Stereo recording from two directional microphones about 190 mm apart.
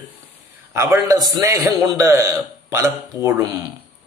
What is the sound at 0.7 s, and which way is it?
A man's voice, 15° right (ahead or behind).